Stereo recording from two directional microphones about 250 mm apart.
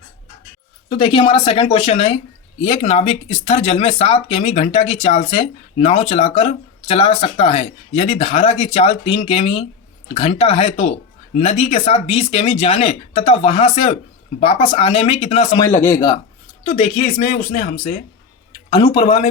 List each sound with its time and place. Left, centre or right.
0.9 s speech: left
18.7 s speech: centre